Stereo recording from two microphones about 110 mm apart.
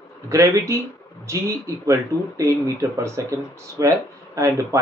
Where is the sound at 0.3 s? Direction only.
25° right (ahead or behind).